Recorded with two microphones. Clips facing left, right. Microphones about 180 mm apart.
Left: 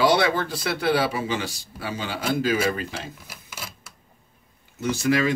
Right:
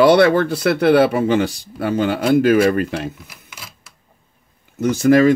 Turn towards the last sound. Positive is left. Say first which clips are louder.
# right 10 dB
turn(degrees=-50)  # may be behind; listen again after turning